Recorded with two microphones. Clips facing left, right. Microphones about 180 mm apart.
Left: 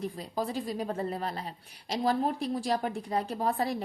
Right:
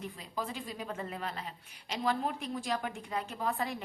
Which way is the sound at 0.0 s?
35° left (ahead or behind).